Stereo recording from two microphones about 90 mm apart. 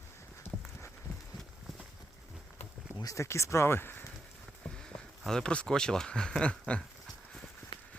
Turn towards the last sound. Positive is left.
turn(degrees=10)  # may be behind; listen again after turning